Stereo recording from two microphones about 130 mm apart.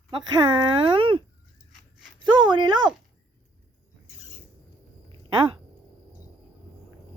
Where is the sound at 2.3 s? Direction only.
35° right (ahead or behind).